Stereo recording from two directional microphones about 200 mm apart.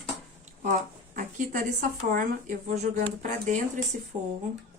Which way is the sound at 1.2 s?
45° right (ahead or behind).